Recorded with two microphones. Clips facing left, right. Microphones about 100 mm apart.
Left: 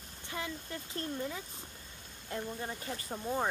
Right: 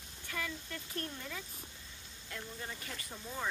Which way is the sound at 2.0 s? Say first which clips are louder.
Left 8 dB; 50° left (ahead or behind).